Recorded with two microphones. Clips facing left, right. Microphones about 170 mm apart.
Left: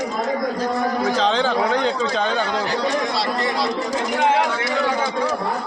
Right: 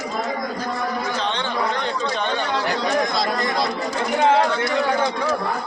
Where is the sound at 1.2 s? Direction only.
90° left.